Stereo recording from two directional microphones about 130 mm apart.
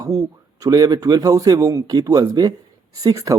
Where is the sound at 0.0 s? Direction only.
25° right (ahead or behind).